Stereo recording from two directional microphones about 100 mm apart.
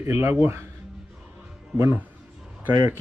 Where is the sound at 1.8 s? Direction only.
20° right (ahead or behind).